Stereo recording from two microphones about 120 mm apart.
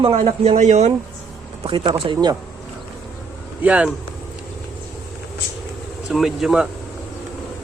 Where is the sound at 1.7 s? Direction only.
40° right (ahead or behind).